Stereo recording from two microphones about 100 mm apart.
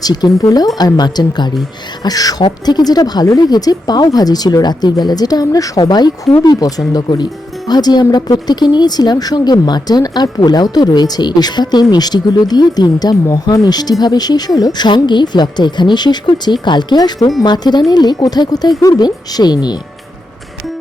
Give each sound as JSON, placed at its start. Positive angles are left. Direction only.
{"t": 0.0, "sound": "speech", "side_deg": 45}